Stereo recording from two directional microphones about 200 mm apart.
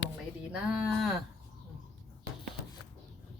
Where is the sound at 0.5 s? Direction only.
5° right (ahead or behind).